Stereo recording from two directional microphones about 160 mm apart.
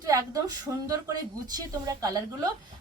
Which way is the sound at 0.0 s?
20° right (ahead or behind).